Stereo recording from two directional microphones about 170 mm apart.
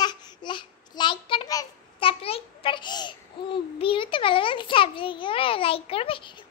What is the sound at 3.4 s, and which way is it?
Child singing, 30° left (ahead or behind).